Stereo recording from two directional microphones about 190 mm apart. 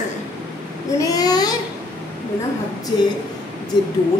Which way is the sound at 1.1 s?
20° left (ahead or behind).